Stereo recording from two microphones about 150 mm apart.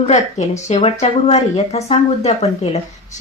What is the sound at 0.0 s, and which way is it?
Speech, 50° left (ahead or behind).